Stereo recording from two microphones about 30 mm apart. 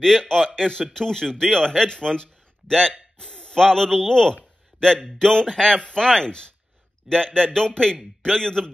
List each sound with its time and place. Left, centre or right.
0.2 s a man's voice: centre